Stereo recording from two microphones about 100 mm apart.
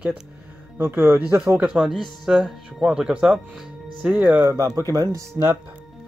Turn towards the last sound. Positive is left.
turn(degrees=-45)  # may be behind; listen again after turning